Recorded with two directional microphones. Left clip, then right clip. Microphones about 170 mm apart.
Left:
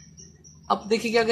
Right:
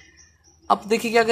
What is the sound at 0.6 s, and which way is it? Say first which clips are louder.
Speech: right 3 dB; 35° right (ahead or behind).